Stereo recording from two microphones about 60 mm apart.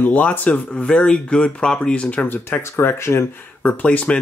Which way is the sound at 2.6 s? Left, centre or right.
Left.